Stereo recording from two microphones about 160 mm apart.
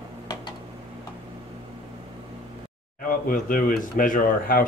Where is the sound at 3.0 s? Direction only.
60° left (ahead or behind).